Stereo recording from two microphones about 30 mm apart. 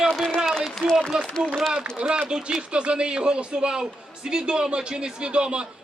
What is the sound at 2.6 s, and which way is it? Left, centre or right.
A man's voice, right.